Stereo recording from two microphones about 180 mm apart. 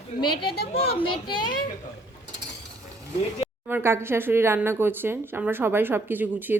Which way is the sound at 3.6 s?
10° right (ahead or behind).